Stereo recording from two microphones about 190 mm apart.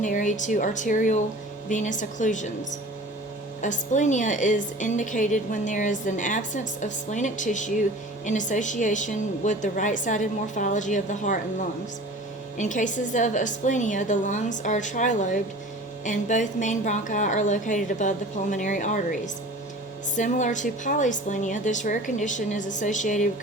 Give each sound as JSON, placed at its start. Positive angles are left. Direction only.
{"t": 0.0, "sound": "a woman's voice", "side_deg": 40}
{"t": 3.6, "sound": "a woman's voice", "side_deg": 40}
{"t": 12.5, "sound": "a woman's voice", "side_deg": 40}